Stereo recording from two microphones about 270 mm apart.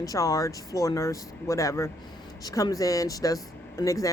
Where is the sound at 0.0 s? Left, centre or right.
Centre.